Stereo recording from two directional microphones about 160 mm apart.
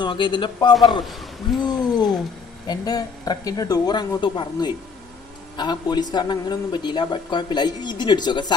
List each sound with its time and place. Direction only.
0.0 s speech: 30° left (ahead or behind)